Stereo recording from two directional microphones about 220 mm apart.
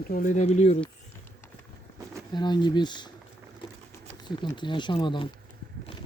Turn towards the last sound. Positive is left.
turn(degrees=20)  # may be behind; listen again after turning